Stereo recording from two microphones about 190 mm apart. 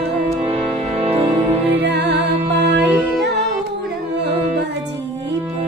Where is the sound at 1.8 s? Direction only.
65° right (ahead or behind).